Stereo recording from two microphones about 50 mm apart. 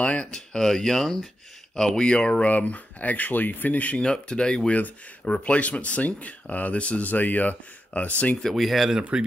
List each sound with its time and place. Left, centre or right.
0.0 s speech: left
2.4 s speech: left
4.0 s speech: centre
8.5 s speech: centre